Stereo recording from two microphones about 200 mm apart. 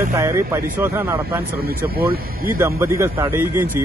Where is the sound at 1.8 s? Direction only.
50° right (ahead or behind).